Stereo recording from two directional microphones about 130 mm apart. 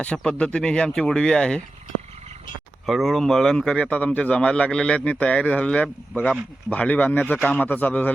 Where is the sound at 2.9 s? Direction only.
Centre (ahead or behind).